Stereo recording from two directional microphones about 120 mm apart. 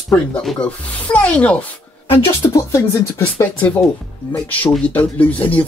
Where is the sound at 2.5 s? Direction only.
30° left (ahead or behind).